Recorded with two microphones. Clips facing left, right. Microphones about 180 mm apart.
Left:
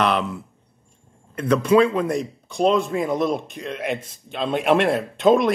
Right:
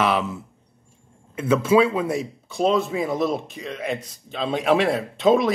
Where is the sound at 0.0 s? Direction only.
5° right (ahead or behind).